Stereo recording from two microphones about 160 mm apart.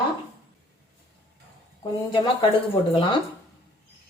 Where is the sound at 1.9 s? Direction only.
25° left (ahead or behind).